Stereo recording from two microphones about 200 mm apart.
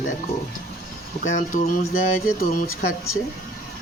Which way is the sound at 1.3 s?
40° left (ahead or behind).